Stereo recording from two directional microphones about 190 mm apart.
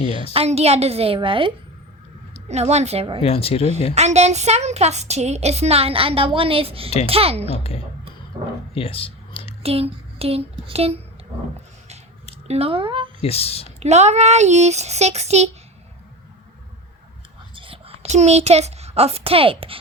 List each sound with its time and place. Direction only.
0.3 s speech: 35° right (ahead or behind)
3.2 s speech: 30° left (ahead or behind)
3.9 s speech: 35° right (ahead or behind)
8.4 s a sound: 35° right (ahead or behind)
8.7 s a sound: 30° left (ahead or behind)
9.6 s speech: 30° right (ahead or behind)
12.5 s speech: 30° right (ahead or behind)
13.2 s speech: 30° left (ahead or behind)
13.7 s speech: 35° right (ahead or behind)
17.5 s a child's voice: 30° right (ahead or behind)